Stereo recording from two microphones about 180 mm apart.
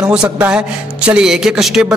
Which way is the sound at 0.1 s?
5° right (ahead or behind).